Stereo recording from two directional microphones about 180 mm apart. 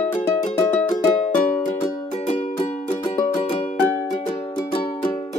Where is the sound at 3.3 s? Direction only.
35° left (ahead or behind).